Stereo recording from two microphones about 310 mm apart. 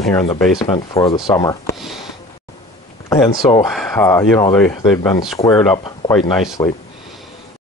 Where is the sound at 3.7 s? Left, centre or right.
Centre.